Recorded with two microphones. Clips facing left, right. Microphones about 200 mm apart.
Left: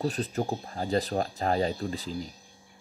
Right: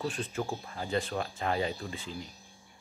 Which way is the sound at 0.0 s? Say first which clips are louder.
Left 5 dB; 40° left (ahead or behind).